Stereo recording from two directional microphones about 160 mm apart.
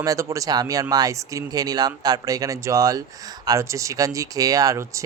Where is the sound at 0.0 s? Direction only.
20° right (ahead or behind).